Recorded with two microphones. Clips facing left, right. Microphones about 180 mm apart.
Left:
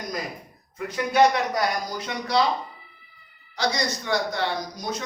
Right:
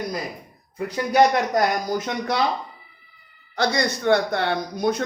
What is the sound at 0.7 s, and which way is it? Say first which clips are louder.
Speech: right 3 dB; 35° right (ahead or behind).